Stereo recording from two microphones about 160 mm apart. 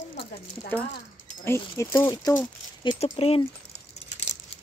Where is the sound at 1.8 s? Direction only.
20° left (ahead or behind).